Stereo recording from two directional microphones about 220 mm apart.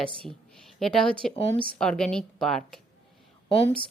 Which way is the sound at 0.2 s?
Centre (ahead or behind).